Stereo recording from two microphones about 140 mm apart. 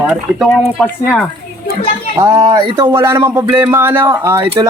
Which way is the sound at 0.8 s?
15° left (ahead or behind).